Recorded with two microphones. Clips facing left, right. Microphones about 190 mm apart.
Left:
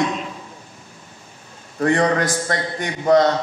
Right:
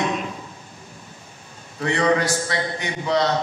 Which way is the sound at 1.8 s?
50° left (ahead or behind).